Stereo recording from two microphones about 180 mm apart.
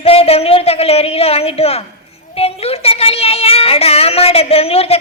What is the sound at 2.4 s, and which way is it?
A woman's voice, 35° left (ahead or behind).